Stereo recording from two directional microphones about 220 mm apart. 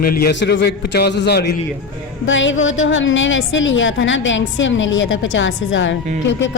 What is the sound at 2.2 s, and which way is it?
A woman's voice, 60° left (ahead or behind).